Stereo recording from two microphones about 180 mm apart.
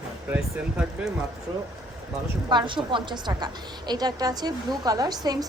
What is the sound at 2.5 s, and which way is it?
A woman's voice, 25° right (ahead or behind).